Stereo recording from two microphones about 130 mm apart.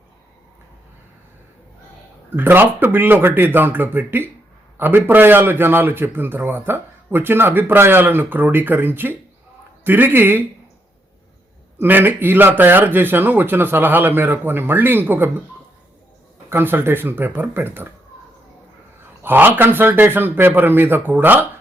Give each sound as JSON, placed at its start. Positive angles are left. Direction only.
{"t": 2.3, "sound": "a man's voice", "side_deg": -15}
{"t": 11.8, "sound": "a man's voice", "side_deg": -15}
{"t": 16.5, "sound": "a man's voice", "side_deg": -15}
{"t": 19.2, "sound": "a man's voice", "side_deg": -15}